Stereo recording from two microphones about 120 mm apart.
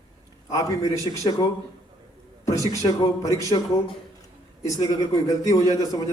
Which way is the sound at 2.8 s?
35° left (ahead or behind).